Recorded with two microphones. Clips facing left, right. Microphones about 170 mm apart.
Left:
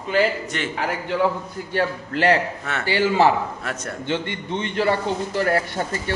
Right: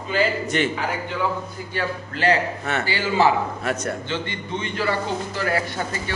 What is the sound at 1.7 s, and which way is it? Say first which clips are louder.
A man's voice: left 5 dB; 65° left (ahead or behind).